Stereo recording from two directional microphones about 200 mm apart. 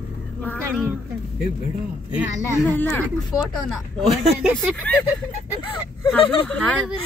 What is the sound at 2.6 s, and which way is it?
Speech, 10° left (ahead or behind).